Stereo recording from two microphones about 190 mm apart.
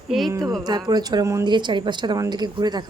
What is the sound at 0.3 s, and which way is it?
Speech, 20° right (ahead or behind).